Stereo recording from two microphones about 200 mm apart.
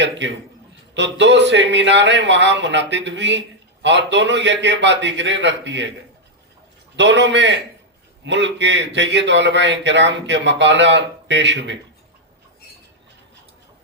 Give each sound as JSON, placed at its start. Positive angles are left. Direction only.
{"t": 0.0, "sound": "a man's voice", "side_deg": -60}
{"t": 6.9, "sound": "a man's voice", "side_deg": -60}